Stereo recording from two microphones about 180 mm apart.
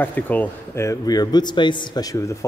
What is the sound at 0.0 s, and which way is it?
A man's voice, 10° left (ahead or behind).